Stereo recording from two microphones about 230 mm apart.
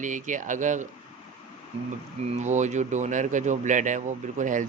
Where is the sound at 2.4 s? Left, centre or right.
Right.